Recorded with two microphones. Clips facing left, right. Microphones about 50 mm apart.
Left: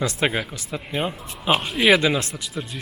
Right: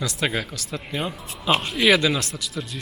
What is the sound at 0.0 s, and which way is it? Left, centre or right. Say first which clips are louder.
Speech: left 3 dB; left.